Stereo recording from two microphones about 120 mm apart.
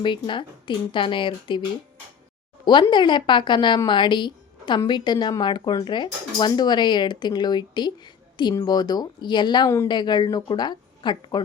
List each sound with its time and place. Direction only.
0.0 s a woman's voice: 40° left (ahead or behind)
2.9 s a woman's voice: 40° left (ahead or behind)
9.6 s a woman's voice: 25° left (ahead or behind)
9.9 s speech: 35° left (ahead or behind)